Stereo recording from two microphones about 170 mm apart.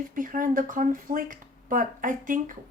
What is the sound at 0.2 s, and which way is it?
Speech, 50° right (ahead or behind).